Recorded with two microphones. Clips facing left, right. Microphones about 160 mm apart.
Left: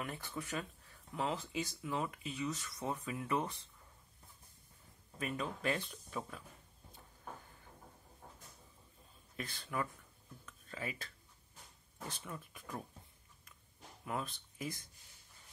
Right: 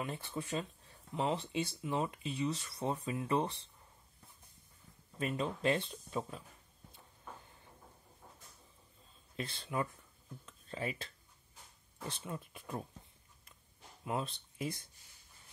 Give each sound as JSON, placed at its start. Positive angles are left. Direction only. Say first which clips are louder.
{"t": 0.0, "sound": "speech", "louder": "right 3 dB", "side_deg": -25}
{"t": 5.2, "sound": "speech", "louder": "right 4 dB", "side_deg": -30}
{"t": 9.4, "sound": "speech", "louder": "right 3 dB", "side_deg": -25}
{"t": 12.1, "sound": "speech", "louder": "right 5 dB", "side_deg": -25}
{"t": 14.0, "sound": "speech", "louder": "right 3 dB", "side_deg": -25}